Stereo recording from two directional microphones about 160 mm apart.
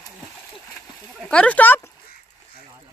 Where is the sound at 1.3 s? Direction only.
10° left (ahead or behind).